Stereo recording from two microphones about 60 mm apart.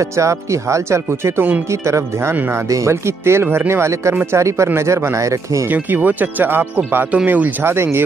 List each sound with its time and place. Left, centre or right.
0.2 s speech: right
5.7 s speech: right
7.7 s speech: right